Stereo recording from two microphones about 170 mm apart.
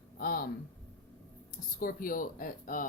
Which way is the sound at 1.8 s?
55° left (ahead or behind).